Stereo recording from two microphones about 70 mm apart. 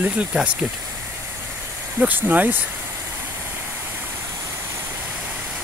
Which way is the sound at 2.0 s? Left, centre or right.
Right.